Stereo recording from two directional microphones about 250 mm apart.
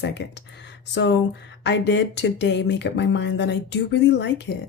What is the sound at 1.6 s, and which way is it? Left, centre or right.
A woman's voice, left.